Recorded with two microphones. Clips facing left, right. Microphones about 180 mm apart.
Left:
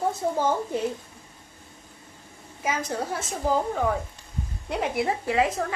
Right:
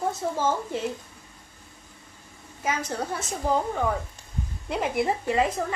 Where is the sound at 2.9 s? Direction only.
Centre (ahead or behind).